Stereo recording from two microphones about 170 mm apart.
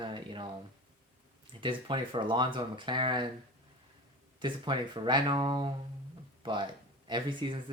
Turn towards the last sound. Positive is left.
turn(degrees=-30)  # may be behind; listen again after turning